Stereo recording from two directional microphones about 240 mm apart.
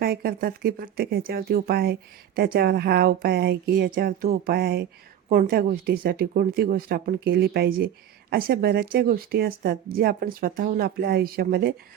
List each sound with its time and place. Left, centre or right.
0.0 s speech: right